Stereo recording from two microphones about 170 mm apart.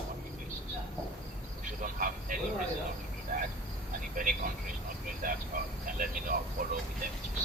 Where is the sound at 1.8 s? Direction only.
50° right (ahead or behind).